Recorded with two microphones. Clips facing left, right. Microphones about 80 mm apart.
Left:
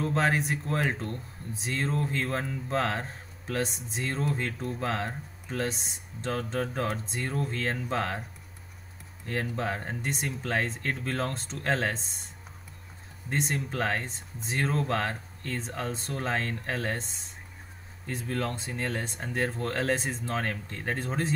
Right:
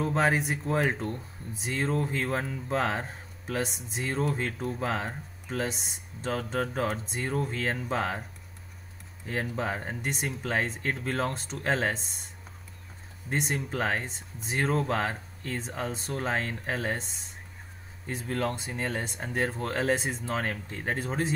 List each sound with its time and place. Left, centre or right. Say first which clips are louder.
0.0 s speech: right 1 dB; centre
9.2 s speech: even; centre
13.3 s speech: even; centre
18.2 s speech: right 2 dB; right
18.6 s speech: even; centre